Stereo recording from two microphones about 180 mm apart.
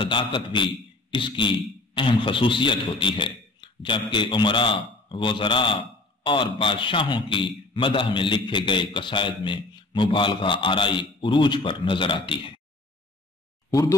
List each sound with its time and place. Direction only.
0.0 s a man's voice: 25° left (ahead or behind)